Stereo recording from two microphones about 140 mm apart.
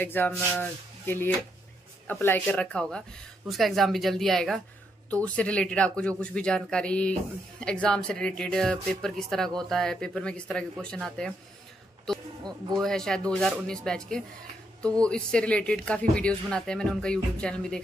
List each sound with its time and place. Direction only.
0.0 s speech: 15° left (ahead or behind)
12.8 s speech: 5° left (ahead or behind)